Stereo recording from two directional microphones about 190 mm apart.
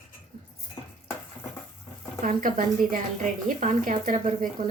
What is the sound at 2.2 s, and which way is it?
A woman's voice, 45° right (ahead or behind).